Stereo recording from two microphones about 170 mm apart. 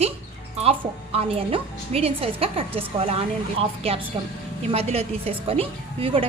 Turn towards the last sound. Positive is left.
turn(degrees=-35)  # may be behind; listen again after turning